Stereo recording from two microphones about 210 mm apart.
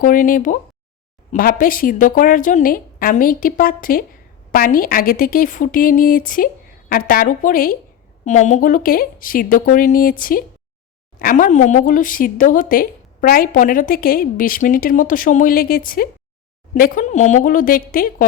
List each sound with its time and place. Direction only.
0.0 s speech: 40° left (ahead or behind)